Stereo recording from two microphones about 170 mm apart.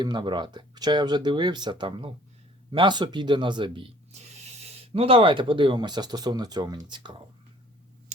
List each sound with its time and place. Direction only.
0.0 s speech: 25° right (ahead or behind)